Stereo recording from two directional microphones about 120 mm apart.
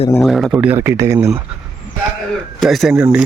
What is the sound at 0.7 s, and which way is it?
Speech, 25° right (ahead or behind).